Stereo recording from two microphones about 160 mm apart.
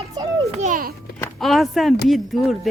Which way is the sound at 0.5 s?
50° right (ahead or behind).